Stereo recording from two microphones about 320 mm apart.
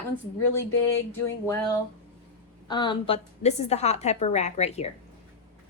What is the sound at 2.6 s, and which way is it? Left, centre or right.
A woman's voice, centre.